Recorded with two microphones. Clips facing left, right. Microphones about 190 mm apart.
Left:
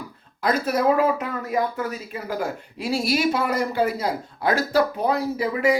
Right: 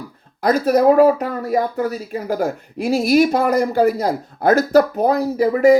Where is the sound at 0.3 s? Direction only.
40° right (ahead or behind).